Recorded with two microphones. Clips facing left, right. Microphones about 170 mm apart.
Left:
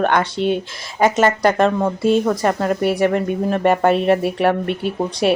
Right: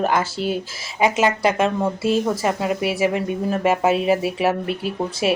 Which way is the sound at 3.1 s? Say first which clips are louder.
Left 3 dB; 50° left (ahead or behind).